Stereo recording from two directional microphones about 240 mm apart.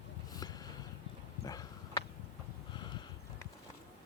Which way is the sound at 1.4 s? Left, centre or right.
Centre.